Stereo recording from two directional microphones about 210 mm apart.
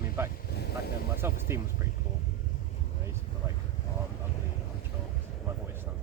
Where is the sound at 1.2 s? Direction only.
10° right (ahead or behind).